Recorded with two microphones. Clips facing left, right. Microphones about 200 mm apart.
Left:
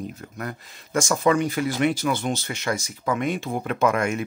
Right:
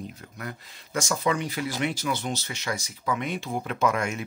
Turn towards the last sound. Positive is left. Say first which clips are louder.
# left 4 dB
turn(degrees=55)  # may be behind; listen again after turning